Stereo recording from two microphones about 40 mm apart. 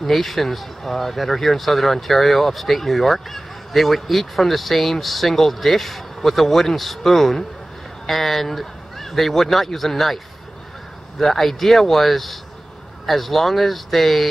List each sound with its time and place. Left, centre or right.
0.0 s speech: centre